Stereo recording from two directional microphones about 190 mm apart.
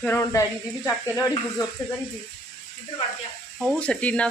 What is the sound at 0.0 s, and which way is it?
Speech, 15° left (ahead or behind).